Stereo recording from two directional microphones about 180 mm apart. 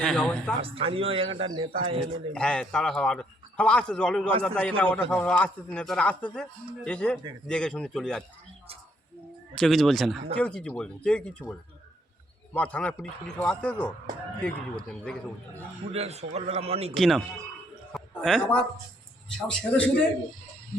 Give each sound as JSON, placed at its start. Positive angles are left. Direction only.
{"t": 0.0, "sound": "a man's voice", "side_deg": 5}
{"t": 0.6, "sound": "a man's voice", "side_deg": -30}
{"t": 2.3, "sound": "a man's voice", "side_deg": 5}
{"t": 9.6, "sound": "a man's voice", "side_deg": 0}
{"t": 12.5, "sound": "a man's voice", "side_deg": 5}
{"t": 15.9, "sound": "a man's voice", "side_deg": -35}
{"t": 16.9, "sound": "a man's voice", "side_deg": 0}